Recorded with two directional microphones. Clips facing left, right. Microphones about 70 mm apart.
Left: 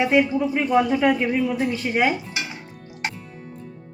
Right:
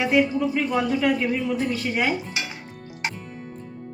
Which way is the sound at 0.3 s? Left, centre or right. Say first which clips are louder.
Left 3 dB; left.